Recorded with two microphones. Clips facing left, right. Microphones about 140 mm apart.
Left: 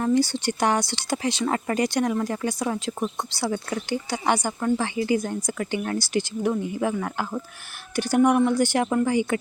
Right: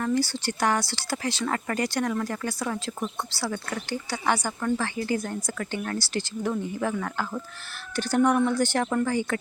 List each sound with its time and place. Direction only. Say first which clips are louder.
0.0 s speech: left 4 dB; 20° left (ahead or behind)